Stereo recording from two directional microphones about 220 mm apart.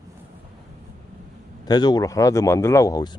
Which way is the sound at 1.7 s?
20° left (ahead or behind).